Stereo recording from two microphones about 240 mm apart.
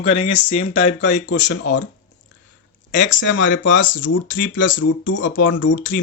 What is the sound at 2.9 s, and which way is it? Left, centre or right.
Speech, left.